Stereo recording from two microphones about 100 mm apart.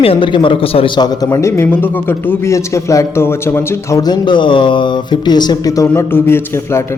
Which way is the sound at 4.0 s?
50° left (ahead or behind).